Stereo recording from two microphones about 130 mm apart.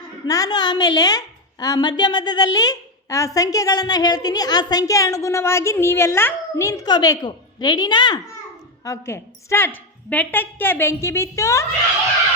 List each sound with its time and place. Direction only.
0.3 s a woman's voice: 30° left (ahead or behind)
8.8 s a woman's voice: 20° left (ahead or behind)